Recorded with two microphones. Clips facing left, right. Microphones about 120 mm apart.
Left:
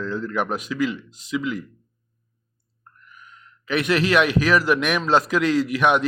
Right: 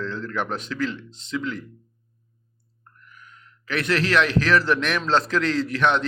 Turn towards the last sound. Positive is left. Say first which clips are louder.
# left 3 dB
turn(degrees=15)  # may be behind; listen again after turning